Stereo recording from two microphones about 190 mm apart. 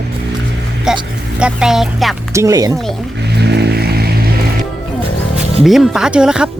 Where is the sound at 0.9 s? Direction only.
5° right (ahead or behind).